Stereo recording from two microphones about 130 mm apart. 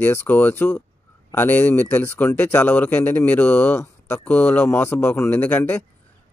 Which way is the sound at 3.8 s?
20° left (ahead or behind).